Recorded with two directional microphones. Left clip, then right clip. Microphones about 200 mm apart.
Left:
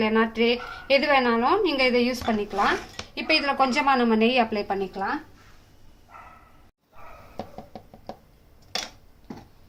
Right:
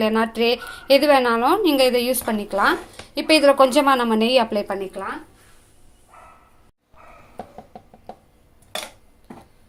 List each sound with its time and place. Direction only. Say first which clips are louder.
0.0 s a woman's voice: right 3 dB; 45° right (ahead or behind)